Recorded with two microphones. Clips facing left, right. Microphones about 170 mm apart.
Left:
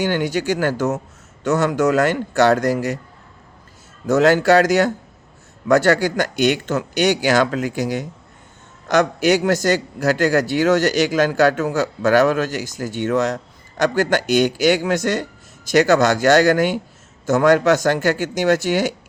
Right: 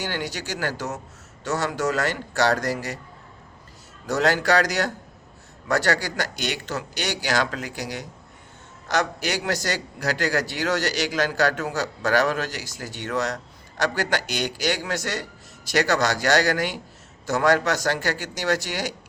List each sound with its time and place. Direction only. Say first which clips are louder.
0.0 s a man's voice: left 10 dB; 55° left (ahead or behind)
4.0 s a man's voice: left 8 dB; 50° left (ahead or behind)